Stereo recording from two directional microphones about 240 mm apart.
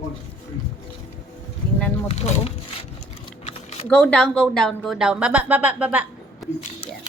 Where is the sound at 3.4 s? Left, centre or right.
Left.